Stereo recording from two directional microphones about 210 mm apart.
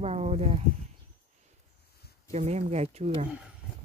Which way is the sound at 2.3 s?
30° right (ahead or behind).